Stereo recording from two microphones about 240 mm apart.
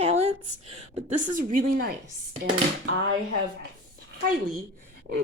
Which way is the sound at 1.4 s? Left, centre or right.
Right.